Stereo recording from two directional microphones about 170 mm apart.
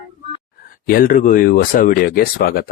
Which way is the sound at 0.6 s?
55° left (ahead or behind).